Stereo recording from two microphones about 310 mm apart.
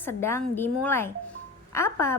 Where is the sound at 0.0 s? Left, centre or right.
Centre.